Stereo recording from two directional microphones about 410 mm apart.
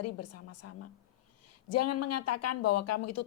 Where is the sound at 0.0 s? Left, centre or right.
Left.